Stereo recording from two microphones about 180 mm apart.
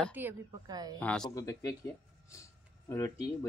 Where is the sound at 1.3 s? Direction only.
20° left (ahead or behind).